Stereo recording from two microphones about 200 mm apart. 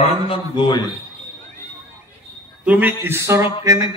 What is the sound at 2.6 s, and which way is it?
Speech, 10° right (ahead or behind).